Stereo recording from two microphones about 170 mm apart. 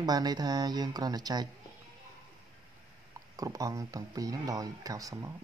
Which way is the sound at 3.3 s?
20° right (ahead or behind).